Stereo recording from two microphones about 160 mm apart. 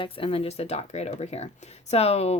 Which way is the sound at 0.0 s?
35° left (ahead or behind).